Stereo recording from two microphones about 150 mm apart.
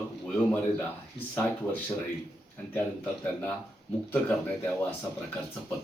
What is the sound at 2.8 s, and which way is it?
Speech, 10° left (ahead or behind).